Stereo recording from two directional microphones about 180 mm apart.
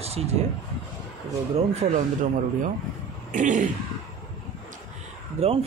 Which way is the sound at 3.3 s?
45° right (ahead or behind).